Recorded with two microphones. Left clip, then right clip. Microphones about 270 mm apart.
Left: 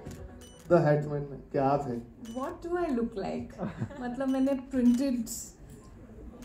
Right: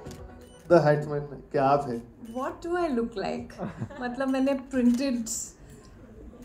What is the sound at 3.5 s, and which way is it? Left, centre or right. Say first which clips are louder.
Speech: right 2 dB; centre.